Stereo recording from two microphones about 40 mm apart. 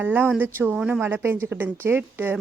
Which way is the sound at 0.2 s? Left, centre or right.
Right.